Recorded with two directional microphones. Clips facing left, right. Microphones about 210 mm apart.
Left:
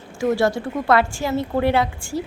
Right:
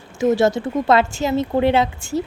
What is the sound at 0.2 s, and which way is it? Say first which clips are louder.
A woman's voice: right 3 dB; 20° right (ahead or behind).